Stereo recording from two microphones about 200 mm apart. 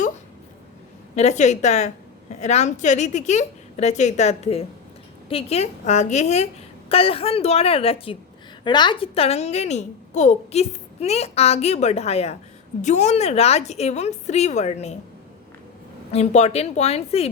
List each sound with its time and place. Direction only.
1.1 s a child's voice: 35° left (ahead or behind)
16.1 s a child's voice: 35° left (ahead or behind)